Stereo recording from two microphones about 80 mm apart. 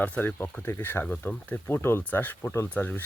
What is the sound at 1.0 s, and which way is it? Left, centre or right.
Speech, centre.